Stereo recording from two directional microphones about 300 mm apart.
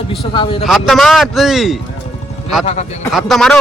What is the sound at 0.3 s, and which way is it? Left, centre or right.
Speech, centre.